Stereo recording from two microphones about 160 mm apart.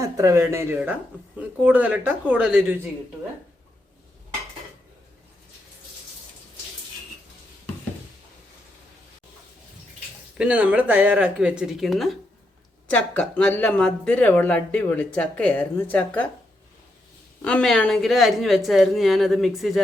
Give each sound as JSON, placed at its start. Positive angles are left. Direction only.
{"t": 0.0, "sound": "speech", "side_deg": -20}
{"t": 10.3, "sound": "speech", "side_deg": -10}
{"t": 17.4, "sound": "speech", "side_deg": 5}